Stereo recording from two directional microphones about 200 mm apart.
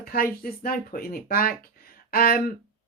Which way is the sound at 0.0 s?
50° left (ahead or behind).